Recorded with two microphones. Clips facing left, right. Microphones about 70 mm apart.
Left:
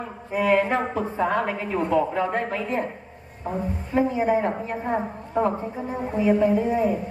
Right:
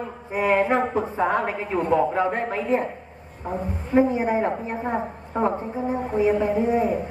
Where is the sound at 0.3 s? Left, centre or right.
Right.